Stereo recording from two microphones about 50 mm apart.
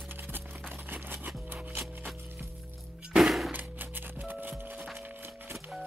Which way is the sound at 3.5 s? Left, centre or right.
Right.